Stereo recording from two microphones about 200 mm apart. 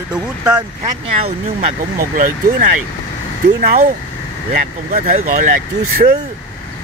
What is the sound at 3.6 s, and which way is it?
Speech, 45° right (ahead or behind).